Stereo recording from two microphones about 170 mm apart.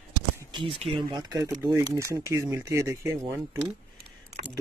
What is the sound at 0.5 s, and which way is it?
Speech, 35° right (ahead or behind).